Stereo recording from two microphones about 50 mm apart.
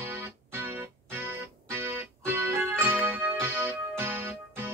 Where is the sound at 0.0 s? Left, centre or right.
Right.